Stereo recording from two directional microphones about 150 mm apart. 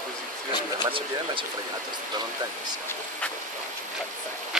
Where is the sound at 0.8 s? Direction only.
35° right (ahead or behind).